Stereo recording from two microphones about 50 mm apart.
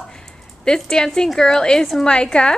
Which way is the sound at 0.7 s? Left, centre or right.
Centre.